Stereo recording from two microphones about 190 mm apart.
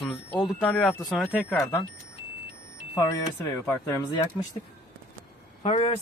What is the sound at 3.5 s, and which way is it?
Speech, 10° left (ahead or behind).